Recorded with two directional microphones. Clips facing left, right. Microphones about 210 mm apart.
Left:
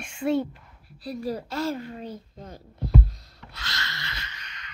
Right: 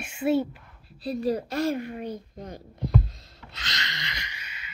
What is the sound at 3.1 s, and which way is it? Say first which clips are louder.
Music: even; 25° right (ahead or behind).